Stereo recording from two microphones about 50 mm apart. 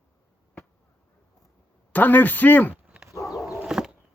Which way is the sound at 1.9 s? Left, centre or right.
Left.